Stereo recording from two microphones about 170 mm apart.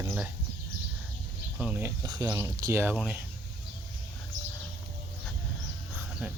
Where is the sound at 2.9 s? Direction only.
5° right (ahead or behind).